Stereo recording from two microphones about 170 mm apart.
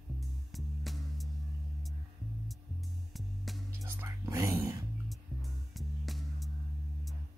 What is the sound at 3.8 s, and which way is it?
Whispering, 20° right (ahead or behind).